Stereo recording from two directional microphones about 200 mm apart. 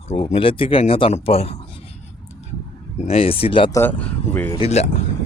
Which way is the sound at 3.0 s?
30° left (ahead or behind).